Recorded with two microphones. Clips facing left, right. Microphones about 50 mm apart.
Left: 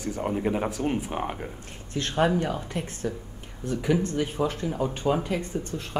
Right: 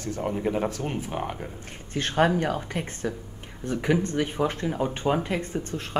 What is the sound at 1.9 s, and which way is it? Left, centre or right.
Speech, right.